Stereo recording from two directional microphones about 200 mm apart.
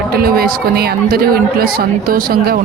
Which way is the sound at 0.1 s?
50° right (ahead or behind).